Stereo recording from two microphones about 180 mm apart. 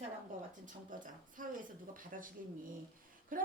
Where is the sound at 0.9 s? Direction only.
50° right (ahead or behind).